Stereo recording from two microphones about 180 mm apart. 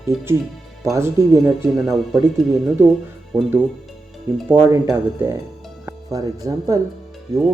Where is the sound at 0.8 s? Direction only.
15° right (ahead or behind).